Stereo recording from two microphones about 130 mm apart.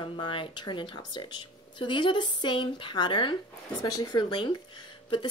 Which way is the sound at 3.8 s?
30° left (ahead or behind).